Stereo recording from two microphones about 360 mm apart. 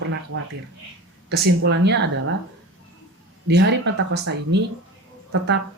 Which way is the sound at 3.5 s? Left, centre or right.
Right.